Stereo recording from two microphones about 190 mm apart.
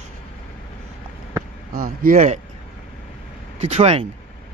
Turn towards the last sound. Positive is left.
turn(degrees=-35)  # may be behind; listen again after turning